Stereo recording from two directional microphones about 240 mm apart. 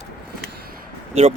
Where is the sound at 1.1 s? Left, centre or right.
Right.